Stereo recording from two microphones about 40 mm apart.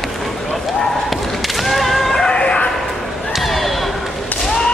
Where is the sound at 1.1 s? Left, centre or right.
Centre.